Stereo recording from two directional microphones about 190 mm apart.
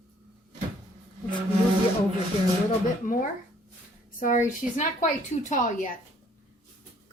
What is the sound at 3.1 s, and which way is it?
Speech, 45° left (ahead or behind).